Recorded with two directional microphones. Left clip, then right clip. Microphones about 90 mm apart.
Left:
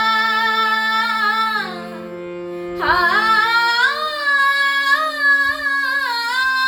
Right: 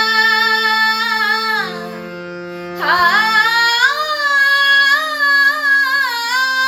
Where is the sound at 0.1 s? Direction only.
40° left (ahead or behind).